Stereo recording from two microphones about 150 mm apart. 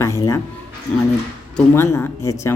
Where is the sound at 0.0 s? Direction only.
20° left (ahead or behind).